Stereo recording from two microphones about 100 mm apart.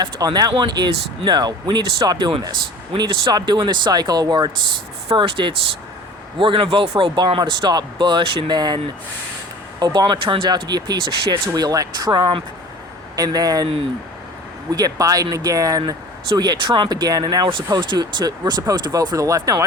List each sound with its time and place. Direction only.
0.0 s a man's voice: 40° right (ahead or behind)
9.8 s speech: 50° right (ahead or behind)
14.7 s speech: 40° right (ahead or behind)